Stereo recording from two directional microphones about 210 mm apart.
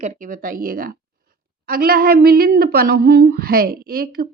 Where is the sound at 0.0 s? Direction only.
40° right (ahead or behind).